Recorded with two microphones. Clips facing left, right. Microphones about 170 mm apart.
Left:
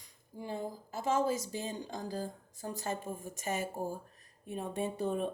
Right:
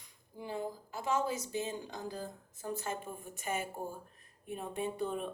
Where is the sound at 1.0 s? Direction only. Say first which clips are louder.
Left 3 dB; 40° left (ahead or behind).